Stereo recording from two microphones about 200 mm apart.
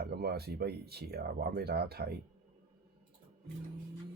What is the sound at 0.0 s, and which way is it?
Speech, 50° right (ahead or behind).